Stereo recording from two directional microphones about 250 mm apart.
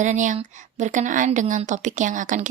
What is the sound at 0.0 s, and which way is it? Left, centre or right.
A woman's voice, right.